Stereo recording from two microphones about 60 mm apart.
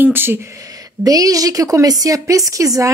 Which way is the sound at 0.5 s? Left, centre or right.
Right.